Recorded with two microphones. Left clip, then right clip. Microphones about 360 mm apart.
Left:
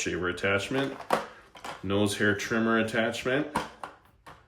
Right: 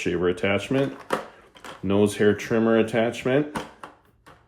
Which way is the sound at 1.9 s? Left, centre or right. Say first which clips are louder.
Right 6 dB; centre.